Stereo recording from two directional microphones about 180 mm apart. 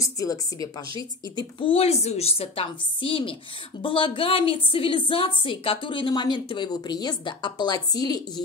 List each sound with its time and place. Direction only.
0.0 s a woman's voice: 20° left (ahead or behind)